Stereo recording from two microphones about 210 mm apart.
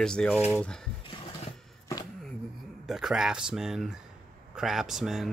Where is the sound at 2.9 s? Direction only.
Centre (ahead or behind).